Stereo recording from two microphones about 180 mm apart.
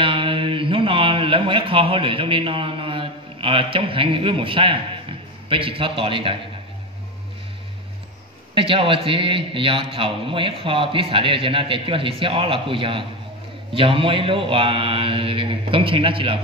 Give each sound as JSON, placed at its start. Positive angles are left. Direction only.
{"t": 0.0, "sound": "a sound", "side_deg": -30}
{"t": 5.5, "sound": "a man's voice", "side_deg": -30}
{"t": 8.5, "sound": "a man's voice", "side_deg": -30}